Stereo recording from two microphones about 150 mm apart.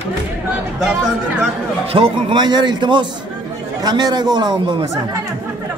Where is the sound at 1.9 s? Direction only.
35° right (ahead or behind).